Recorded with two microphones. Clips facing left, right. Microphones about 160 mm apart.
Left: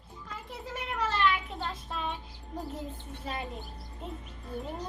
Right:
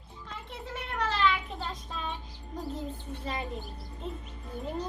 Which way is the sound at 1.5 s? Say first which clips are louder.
Left 1 dB; 5° left (ahead or behind).